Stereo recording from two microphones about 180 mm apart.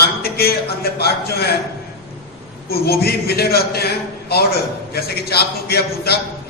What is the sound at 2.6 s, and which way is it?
A man's voice, 60° left (ahead or behind).